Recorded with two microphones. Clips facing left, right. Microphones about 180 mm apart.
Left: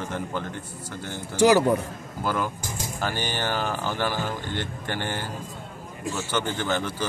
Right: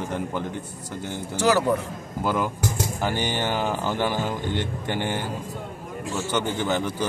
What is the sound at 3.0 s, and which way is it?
Speech, 20° right (ahead or behind).